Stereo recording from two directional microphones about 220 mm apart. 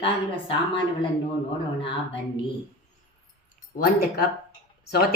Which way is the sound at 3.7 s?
40° left (ahead or behind).